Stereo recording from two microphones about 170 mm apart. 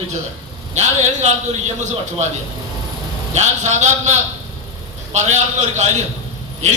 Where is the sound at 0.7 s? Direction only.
40° right (ahead or behind).